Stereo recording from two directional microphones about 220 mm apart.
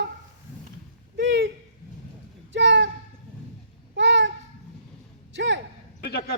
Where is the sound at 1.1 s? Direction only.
50° right (ahead or behind).